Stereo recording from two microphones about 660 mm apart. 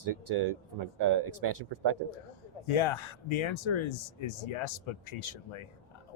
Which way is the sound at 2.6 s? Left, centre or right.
Left.